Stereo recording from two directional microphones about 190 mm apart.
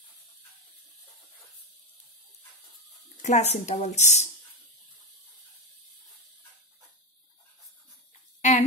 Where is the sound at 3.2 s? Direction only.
40° left (ahead or behind).